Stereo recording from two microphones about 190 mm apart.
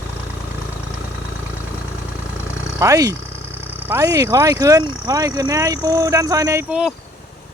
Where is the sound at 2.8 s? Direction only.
20° right (ahead or behind).